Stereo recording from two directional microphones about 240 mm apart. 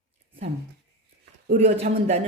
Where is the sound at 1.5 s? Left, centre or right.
Right.